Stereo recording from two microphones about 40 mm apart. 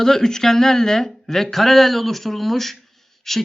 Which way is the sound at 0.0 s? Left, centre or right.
Centre.